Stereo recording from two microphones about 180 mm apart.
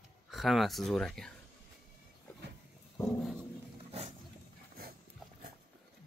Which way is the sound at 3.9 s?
35° right (ahead or behind).